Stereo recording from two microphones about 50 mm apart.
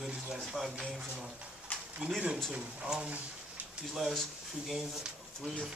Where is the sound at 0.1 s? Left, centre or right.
Right.